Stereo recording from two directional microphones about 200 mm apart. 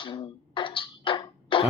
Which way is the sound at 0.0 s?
25° left (ahead or behind).